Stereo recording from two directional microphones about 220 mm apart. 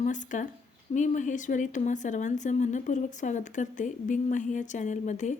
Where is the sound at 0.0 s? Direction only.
35° left (ahead or behind).